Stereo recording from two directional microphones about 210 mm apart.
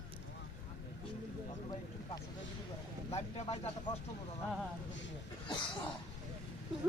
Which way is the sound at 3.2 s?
30° left (ahead or behind).